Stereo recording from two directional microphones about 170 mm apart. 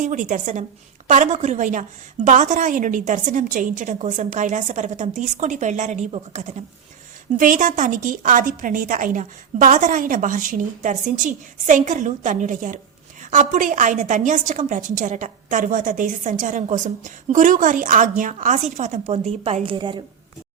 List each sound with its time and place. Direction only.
0.0 s a woman's voice: 45° right (ahead or behind)
7.3 s a woman's voice: 50° right (ahead or behind); by 20.0 s 30° right (ahead or behind)